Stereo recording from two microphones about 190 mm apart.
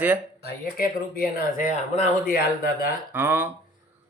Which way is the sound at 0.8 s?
50° left (ahead or behind).